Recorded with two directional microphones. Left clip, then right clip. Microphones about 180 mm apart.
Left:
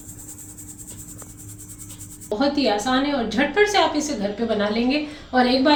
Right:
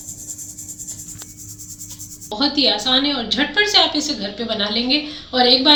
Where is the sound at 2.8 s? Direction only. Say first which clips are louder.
Right 4 dB; 15° left (ahead or behind).